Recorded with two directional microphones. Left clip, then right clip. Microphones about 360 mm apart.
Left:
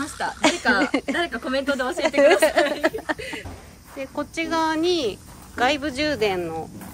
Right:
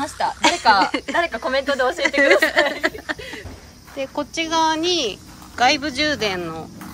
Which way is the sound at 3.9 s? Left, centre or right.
Centre.